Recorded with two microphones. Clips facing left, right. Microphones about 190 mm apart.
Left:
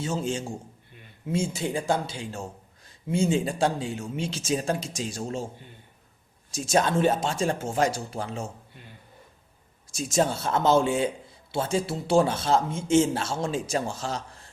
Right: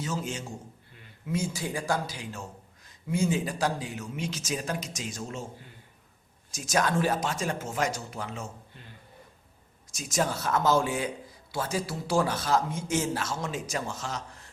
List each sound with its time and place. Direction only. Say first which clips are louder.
0.0 s a man's voice: left 5 dB; 30° left (ahead or behind)
6.5 s a man's voice: left 4 dB; 30° left (ahead or behind)
9.9 s a man's voice: left 5 dB; 30° left (ahead or behind)